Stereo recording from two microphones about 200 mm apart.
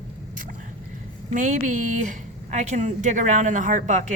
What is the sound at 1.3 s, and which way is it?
Speech, 40° right (ahead or behind).